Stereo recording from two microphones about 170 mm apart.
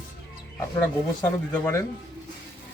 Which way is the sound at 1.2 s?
15° left (ahead or behind).